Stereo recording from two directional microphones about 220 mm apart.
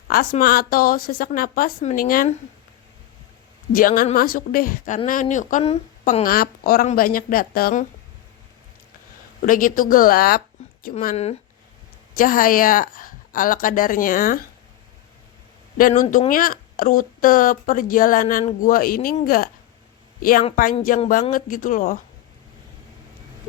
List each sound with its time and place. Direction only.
0.1 s speech: 40° left (ahead or behind)
3.7 s speech: 40° left (ahead or behind)
6.2 s speech: 40° left (ahead or behind)
9.4 s speech: 40° left (ahead or behind)
15.8 s speech: 35° left (ahead or behind)
21.1 s speech: 40° left (ahead or behind)